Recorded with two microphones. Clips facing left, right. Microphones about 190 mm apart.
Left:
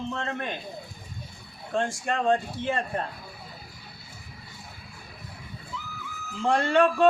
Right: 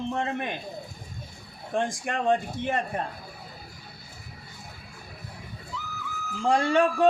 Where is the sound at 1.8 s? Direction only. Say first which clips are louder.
Left 1 dB; 15° right (ahead or behind).